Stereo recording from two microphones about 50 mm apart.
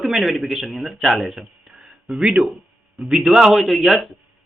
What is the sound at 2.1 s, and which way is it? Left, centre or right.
A man's voice, centre.